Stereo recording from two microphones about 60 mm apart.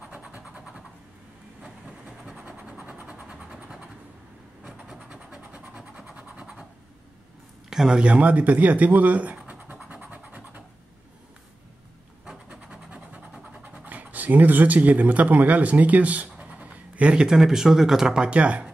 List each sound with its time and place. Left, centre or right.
0.1 s vehicle: right
1.9 s vehicle: centre
2.4 s train: right
2.8 s vehicle: right
4.8 s vehicle: centre
6.1 s scratch: right
7.7 s a sound: centre
13.8 s speech: right
17.3 s speech: centre